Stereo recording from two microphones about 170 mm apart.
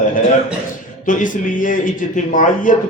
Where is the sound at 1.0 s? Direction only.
50° left (ahead or behind).